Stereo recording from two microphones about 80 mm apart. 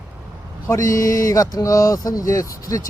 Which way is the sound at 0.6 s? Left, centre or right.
Left.